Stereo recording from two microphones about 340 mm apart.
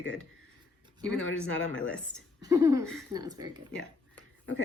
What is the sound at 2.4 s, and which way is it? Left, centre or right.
A woman's voice, centre.